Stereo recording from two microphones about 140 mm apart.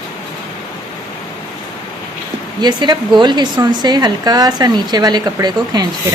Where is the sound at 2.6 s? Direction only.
30° right (ahead or behind).